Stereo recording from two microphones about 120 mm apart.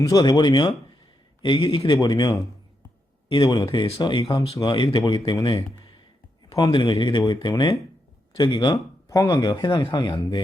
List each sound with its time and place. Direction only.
0.0 s speech: 30° left (ahead or behind)